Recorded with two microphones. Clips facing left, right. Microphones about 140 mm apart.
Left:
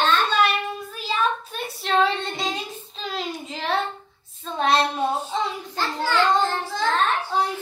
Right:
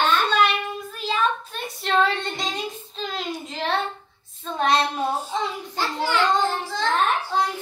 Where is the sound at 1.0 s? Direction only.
5° left (ahead or behind).